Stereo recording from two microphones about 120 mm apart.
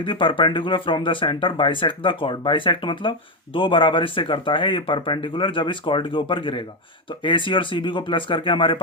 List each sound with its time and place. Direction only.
0.0 s speech: 45° left (ahead or behind)